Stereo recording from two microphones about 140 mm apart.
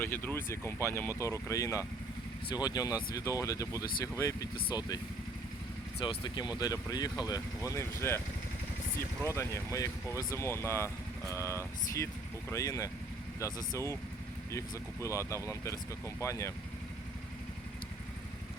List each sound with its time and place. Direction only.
0.0 s speech: 15° left (ahead or behind)
6.1 s speech: 30° left (ahead or behind)
9.2 s speech: 20° left (ahead or behind)
15.0 s speech: 20° left (ahead or behind)